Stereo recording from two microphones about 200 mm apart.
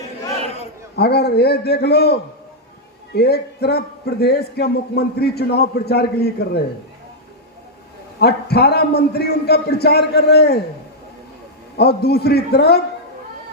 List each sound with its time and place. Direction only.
0.9 s a man's voice: 55° left (ahead or behind)
8.2 s a man's voice: 55° left (ahead or behind)
11.8 s a man's voice: 55° left (ahead or behind)